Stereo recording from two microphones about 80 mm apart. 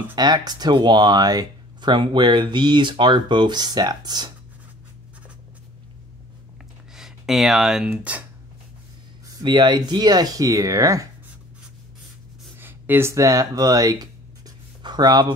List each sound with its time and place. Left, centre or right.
0.1 s speech: right
1.9 s speech: right
7.0 s speech: centre
7.9 s speech: right
9.4 s speech: right
12.5 s a sound: right
13.1 s speech: right
14.8 s speech: right